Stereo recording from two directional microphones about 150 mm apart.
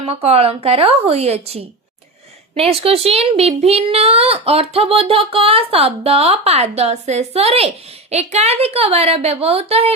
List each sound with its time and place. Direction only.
0.0 s a woman's voice: 40° right (ahead or behind)